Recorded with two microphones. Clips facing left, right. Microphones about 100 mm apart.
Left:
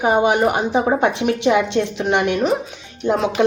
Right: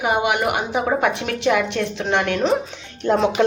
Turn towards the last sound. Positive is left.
turn(degrees=5)  # may be behind; listen again after turning